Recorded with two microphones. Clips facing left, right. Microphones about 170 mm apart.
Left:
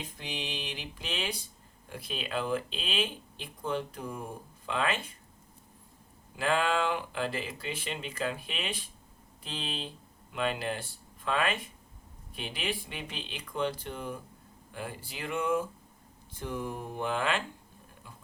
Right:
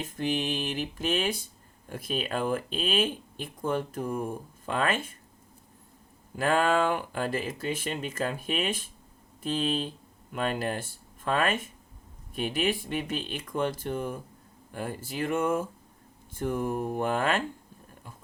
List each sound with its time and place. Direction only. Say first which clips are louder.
0.0 s speech: right 10 dB; 50° right (ahead or behind)
6.3 s speech: right 4 dB; 45° right (ahead or behind)